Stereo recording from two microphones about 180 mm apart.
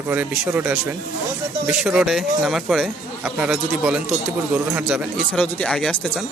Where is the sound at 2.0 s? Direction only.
Centre (ahead or behind).